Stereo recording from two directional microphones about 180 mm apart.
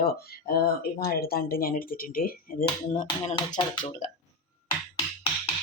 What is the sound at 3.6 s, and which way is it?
Speech, 40° left (ahead or behind).